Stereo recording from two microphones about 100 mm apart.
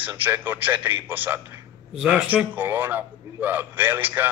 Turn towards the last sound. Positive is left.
turn(degrees=-20)  # may be behind; listen again after turning